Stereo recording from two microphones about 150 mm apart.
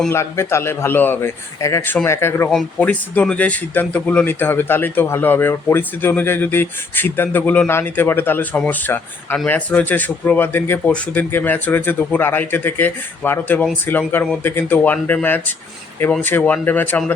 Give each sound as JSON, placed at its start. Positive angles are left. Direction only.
{"t": 0.1, "sound": "speech", "side_deg": 20}